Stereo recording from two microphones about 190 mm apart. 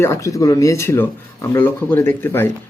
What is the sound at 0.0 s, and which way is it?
Speech, 15° left (ahead or behind).